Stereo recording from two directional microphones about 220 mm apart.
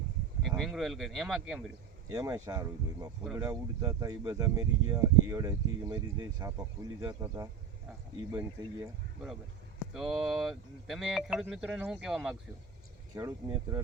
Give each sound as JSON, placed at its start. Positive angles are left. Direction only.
{"t": 0.4, "sound": "speech", "side_deg": 0}
{"t": 2.0, "sound": "speech", "side_deg": -15}
{"t": 13.1, "sound": "speech", "side_deg": -15}